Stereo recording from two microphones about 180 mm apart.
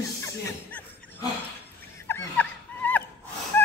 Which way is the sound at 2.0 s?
10° left (ahead or behind).